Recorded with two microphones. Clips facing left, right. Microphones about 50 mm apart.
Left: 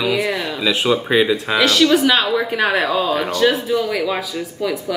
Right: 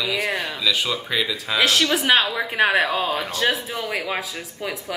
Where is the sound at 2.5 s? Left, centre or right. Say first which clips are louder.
Right 2 dB; right.